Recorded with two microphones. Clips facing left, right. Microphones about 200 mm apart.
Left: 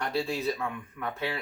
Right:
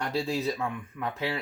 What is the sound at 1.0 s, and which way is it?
Speech, 30° right (ahead or behind).